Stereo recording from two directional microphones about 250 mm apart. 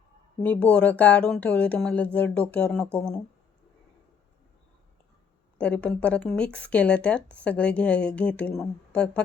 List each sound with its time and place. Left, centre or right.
0.4 s speech: centre
5.5 s speech: centre